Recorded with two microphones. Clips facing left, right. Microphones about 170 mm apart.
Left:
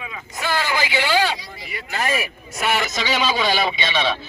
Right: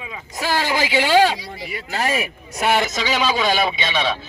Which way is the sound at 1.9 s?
35° right (ahead or behind).